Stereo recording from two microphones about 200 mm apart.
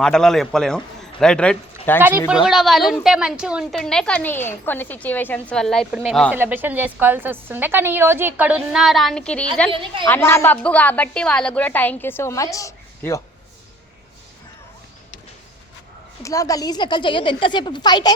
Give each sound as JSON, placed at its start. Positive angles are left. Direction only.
{"t": 0.0, "sound": "a woman's voice", "side_deg": 5}
{"t": 2.0, "sound": "a woman's voice", "side_deg": -10}
{"t": 9.7, "sound": "a woman's voice", "side_deg": -25}
{"t": 10.1, "sound": "a woman's voice", "side_deg": 10}
{"t": 16.2, "sound": "speech", "side_deg": 15}